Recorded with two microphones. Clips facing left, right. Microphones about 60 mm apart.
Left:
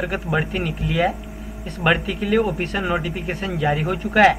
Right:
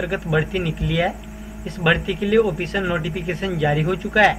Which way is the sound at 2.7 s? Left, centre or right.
Centre.